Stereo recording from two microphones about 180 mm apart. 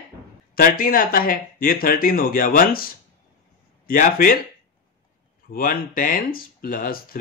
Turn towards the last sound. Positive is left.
turn(degrees=55)  # may be behind; listen again after turning